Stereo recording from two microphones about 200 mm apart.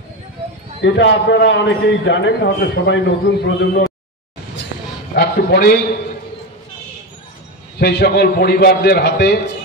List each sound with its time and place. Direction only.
0.8 s a man's voice: 65° left (ahead or behind)
5.1 s a man's voice: 55° left (ahead or behind)
7.8 s a man's voice: 55° left (ahead or behind)